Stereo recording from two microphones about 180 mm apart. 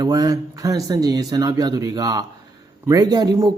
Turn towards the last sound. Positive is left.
turn(degrees=-20)  # may be behind; listen again after turning